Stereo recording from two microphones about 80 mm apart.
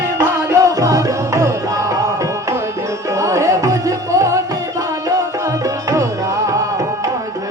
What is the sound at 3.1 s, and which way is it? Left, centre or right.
Music, right.